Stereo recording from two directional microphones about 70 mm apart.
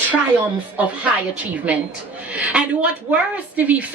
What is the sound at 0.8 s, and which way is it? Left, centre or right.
A woman's voice, right.